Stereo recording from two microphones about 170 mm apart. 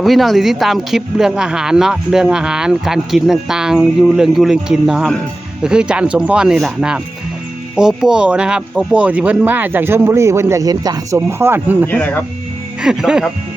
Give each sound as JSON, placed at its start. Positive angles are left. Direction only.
{"t": 0.0, "sound": "speech", "side_deg": 0}
{"t": 11.9, "sound": "speech", "side_deg": 10}
{"t": 12.8, "sound": "speech", "side_deg": -5}